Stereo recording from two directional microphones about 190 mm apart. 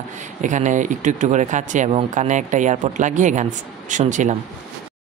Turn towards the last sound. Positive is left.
turn(degrees=-40)  # may be behind; listen again after turning